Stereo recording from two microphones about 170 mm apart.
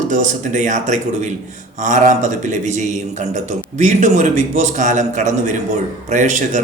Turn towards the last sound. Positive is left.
turn(degrees=-45)  # may be behind; listen again after turning